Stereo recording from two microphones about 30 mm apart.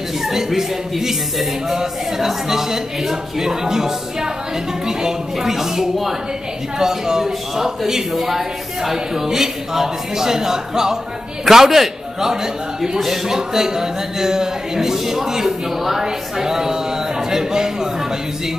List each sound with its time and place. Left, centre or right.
0.2 s speech: centre